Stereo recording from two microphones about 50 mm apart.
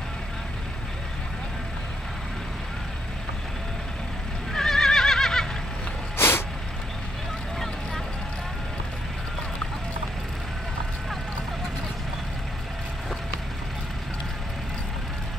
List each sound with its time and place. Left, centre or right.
4.5 s neigh: centre
6.1 s vehicle: left
7.5 s vehicle: centre